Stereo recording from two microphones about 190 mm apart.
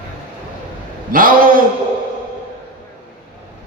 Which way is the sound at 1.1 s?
50° right (ahead or behind).